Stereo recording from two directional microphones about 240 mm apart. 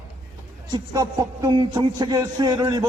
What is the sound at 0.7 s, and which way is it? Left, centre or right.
A man's voice, centre.